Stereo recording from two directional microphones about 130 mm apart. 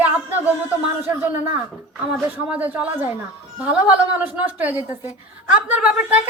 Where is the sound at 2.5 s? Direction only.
15° right (ahead or behind).